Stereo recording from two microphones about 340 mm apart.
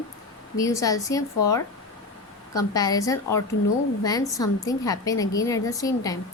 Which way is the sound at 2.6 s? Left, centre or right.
Centre.